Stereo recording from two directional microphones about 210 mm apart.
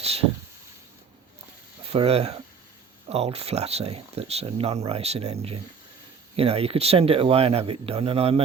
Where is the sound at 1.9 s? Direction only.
30° right (ahead or behind).